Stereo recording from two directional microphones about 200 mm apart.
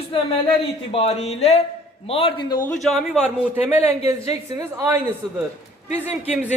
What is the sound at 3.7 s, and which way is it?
A woman's voice, 10° right (ahead or behind).